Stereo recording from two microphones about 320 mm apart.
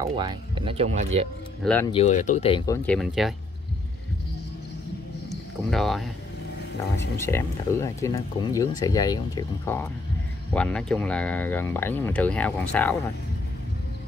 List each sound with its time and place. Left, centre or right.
0.0 s speech: centre
1.6 s speech: centre
1.9 s speech: centre
5.3 s speech: centre
7.2 s speech: centre